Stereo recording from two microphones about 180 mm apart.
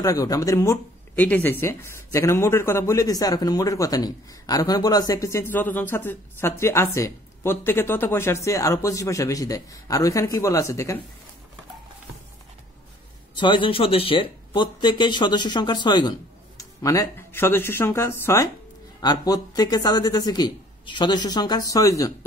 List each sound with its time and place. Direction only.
0.0 s speech: 20° left (ahead or behind)
13.4 s speech: 25° left (ahead or behind)